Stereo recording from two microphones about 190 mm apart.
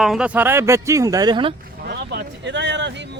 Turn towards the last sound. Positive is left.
turn(degrees=-65)  # may be behind; listen again after turning